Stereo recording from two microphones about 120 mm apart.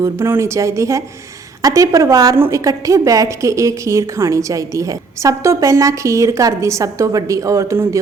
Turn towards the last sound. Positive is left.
turn(degrees=-20)  # may be behind; listen again after turning